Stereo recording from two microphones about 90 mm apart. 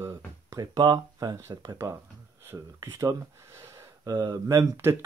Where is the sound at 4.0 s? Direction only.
50° right (ahead or behind).